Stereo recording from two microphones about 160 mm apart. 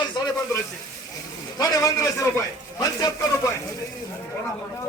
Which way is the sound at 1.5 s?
25° left (ahead or behind).